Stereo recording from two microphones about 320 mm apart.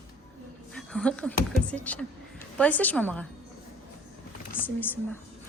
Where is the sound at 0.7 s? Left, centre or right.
Centre.